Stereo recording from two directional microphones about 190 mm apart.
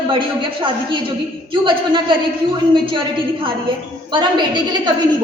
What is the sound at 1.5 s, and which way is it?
Speech, 25° right (ahead or behind).